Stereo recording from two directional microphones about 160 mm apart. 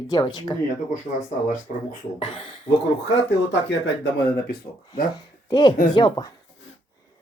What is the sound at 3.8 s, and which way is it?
Speech, 90° left.